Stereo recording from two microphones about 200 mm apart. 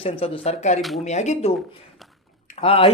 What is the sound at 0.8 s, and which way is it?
Speech, centre (ahead or behind).